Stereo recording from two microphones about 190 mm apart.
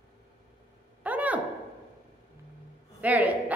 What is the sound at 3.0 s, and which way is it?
Speech, 10° right (ahead or behind).